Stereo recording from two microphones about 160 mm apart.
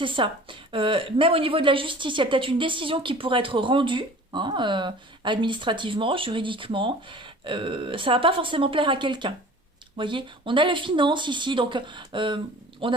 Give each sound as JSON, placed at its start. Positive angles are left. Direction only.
{"t": 0.0, "sound": "a woman's voice", "side_deg": -30}